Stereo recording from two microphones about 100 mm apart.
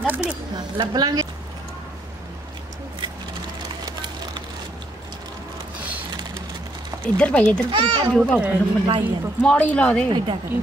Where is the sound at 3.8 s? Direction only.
45° right (ahead or behind).